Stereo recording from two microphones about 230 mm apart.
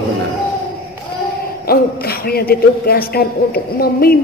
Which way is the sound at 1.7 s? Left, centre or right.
Left.